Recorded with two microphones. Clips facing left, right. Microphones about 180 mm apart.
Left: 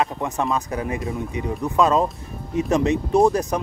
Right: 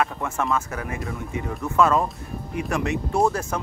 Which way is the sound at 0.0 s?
20° left (ahead or behind).